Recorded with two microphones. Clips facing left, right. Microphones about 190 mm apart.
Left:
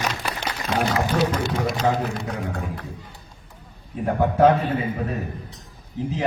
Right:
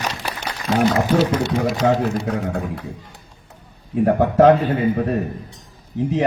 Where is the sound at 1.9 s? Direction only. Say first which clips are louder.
Right 5 dB; 70° right (ahead or behind).